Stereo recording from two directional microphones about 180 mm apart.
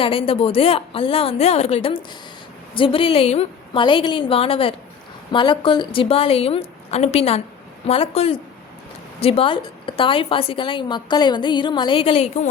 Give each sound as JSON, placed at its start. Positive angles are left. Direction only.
{"t": 0.0, "sound": "a woman's voice", "side_deg": 30}